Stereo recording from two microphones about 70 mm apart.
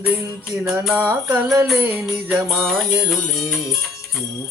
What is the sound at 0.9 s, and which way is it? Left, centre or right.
Speech, right.